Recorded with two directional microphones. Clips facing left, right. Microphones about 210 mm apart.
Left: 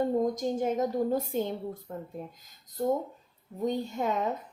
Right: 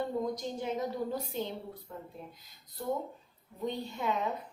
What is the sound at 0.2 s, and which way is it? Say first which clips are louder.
A woman's voice: left 7 dB; 45° left (ahead or behind).